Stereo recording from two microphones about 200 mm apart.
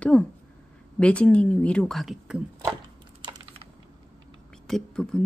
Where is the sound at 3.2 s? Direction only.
20° right (ahead or behind).